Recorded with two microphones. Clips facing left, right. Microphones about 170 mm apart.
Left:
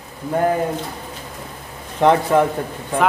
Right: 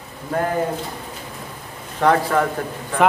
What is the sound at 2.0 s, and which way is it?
Speech, 20° left (ahead or behind).